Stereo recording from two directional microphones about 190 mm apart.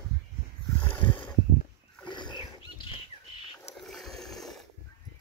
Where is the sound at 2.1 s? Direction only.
25° left (ahead or behind).